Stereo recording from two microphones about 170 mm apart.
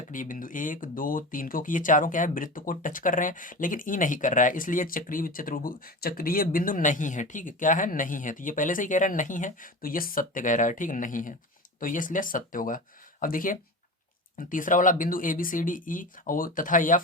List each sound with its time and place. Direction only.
0.0 s speech: 50° left (ahead or behind)